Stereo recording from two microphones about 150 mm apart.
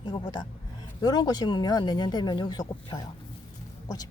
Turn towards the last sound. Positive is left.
turn(degrees=25)  # may be behind; listen again after turning